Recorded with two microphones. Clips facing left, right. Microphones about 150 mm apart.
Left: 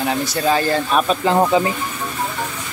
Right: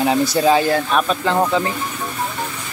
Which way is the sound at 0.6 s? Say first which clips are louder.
Even; centre (ahead or behind).